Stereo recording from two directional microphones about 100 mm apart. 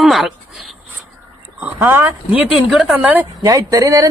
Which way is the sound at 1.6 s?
20° right (ahead or behind).